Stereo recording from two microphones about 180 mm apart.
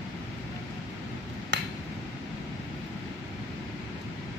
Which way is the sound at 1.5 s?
70° right (ahead or behind).